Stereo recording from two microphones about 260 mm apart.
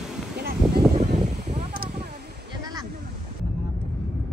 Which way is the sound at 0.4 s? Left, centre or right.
Right.